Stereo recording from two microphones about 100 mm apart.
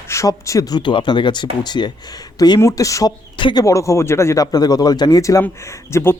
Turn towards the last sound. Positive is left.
turn(degrees=25)  # may be behind; listen again after turning